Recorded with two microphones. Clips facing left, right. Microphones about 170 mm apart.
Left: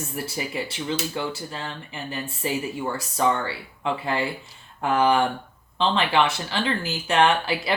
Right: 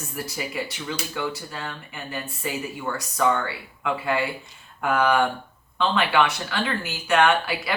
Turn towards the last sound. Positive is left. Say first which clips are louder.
# even
turn(degrees=25)  # may be behind; listen again after turning